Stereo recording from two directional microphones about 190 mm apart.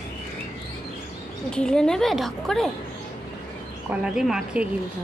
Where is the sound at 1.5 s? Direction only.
5° left (ahead or behind).